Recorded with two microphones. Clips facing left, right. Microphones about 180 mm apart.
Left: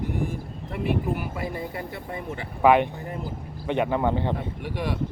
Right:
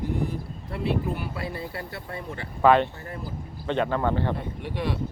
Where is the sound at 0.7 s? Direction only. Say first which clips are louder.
Left 1 dB; 10° left (ahead or behind).